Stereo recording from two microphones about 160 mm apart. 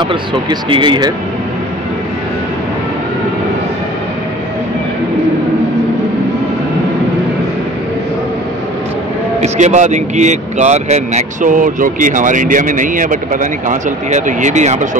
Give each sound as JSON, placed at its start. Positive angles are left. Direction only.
{"t": 0.0, "sound": "speech", "side_deg": -30}
{"t": 9.4, "sound": "speech", "side_deg": -45}